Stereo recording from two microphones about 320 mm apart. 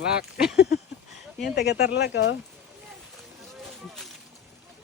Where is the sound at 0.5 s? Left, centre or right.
Left.